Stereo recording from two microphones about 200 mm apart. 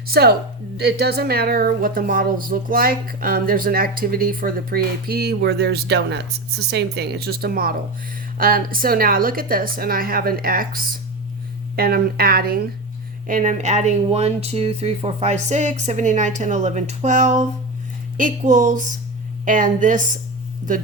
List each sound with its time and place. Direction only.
0.1 s a woman's voice: 50° right (ahead or behind)